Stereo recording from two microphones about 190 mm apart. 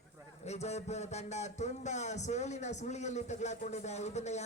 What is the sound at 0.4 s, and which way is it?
A man's voice, 35° left (ahead or behind).